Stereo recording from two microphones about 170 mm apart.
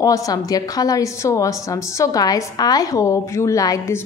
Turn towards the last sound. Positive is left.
turn(degrees=20)  # may be behind; listen again after turning